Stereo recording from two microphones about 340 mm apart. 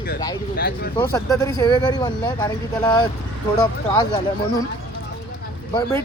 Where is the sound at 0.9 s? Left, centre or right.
Centre.